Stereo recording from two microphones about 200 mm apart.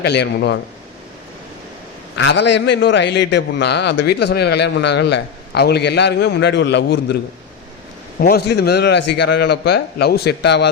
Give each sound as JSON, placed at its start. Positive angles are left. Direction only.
{"t": 0.0, "sound": "a man's voice", "side_deg": 55}
{"t": 2.1, "sound": "a man's voice", "side_deg": 60}
{"t": 8.2, "sound": "a man's voice", "side_deg": 50}